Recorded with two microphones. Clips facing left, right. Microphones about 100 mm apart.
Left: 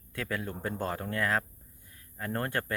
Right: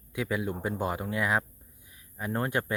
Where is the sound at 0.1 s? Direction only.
15° right (ahead or behind).